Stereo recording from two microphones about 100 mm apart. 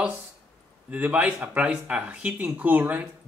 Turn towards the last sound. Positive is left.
turn(degrees=-20)  # may be behind; listen again after turning